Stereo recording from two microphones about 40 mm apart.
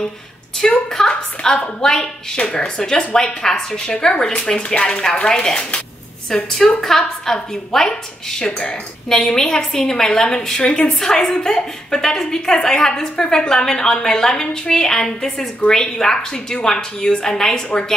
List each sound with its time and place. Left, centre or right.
0.6 s a woman's voice: centre
3.8 s a woman's voice: left